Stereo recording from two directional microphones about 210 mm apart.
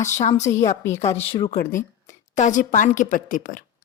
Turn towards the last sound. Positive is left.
turn(degrees=40)  # may be behind; listen again after turning